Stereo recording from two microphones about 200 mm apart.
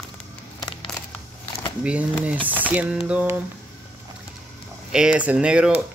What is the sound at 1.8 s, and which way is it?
Speech, 5° right (ahead or behind).